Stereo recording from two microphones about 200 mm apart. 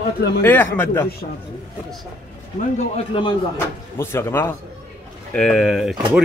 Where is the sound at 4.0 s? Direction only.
15° left (ahead or behind).